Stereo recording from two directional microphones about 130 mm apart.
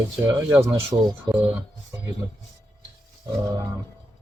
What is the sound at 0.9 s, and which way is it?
Speech, 30° right (ahead or behind).